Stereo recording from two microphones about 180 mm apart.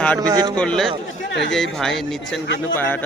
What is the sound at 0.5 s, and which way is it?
A man's voice, 5° left (ahead or behind).